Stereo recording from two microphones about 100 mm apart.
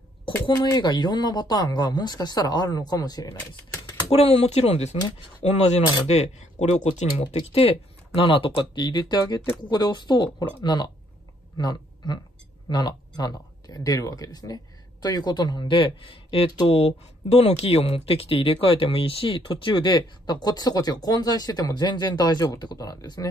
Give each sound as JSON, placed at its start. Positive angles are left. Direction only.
{"t": 0.6, "sound": "speech", "side_deg": 45}
{"t": 4.1, "sound": "speech", "side_deg": 80}
{"t": 6.9, "sound": "speech", "side_deg": 65}
{"t": 16.6, "sound": "speech", "side_deg": 90}